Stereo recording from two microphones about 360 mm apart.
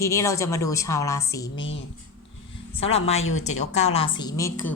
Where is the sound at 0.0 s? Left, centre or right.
Centre.